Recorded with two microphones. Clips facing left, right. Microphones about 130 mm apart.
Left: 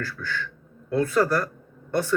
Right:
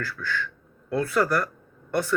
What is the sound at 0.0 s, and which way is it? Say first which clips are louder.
Speech: right 1 dB; 30° left (ahead or behind).